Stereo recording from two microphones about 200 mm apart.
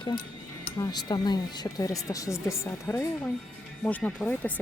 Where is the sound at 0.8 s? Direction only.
20° left (ahead or behind).